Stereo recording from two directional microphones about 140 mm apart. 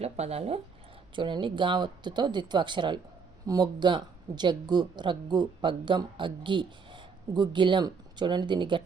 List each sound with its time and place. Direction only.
0.0 s speech: 50° right (ahead or behind)
1.1 s speech: 35° right (ahead or behind)